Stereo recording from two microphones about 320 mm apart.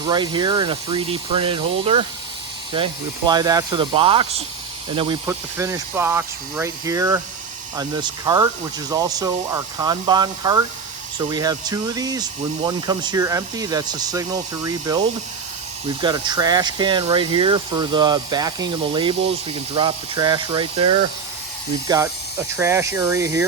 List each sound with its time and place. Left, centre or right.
0.0 s speech: centre